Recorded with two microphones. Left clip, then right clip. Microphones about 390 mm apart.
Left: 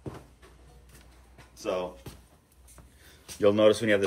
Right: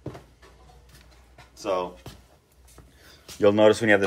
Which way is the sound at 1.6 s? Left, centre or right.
Centre.